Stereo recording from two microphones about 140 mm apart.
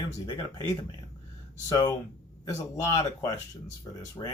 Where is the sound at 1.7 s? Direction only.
30° left (ahead or behind).